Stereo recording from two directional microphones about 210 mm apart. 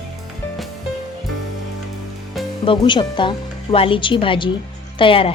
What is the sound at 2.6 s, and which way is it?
Speech, 20° left (ahead or behind).